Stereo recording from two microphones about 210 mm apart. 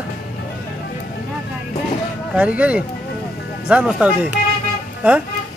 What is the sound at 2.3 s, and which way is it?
Speech, 5° right (ahead or behind).